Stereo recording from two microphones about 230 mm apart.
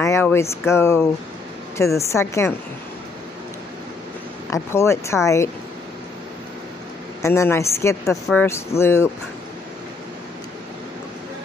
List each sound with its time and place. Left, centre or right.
0.0 s speech: centre
4.5 s speech: centre
7.2 s speech: centre